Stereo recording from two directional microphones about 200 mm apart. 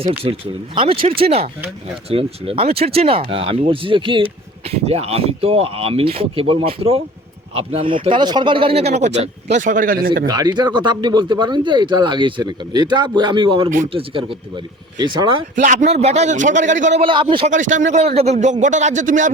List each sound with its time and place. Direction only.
0.2 s speech: 25° right (ahead or behind); by 10.1 s 45° right (ahead or behind)
10.2 s speech: 20° right (ahead or behind)
15.5 s speech: 40° right (ahead or behind)